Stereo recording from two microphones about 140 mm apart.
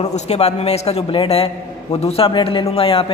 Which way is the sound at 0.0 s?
55° left (ahead or behind).